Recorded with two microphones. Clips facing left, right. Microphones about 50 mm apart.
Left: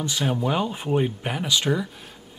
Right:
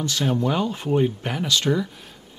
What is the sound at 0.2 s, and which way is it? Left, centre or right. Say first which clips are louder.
Speech: right 1 dB; centre.